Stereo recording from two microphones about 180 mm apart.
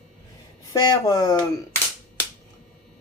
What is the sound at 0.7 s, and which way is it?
Speech, 20° left (ahead or behind).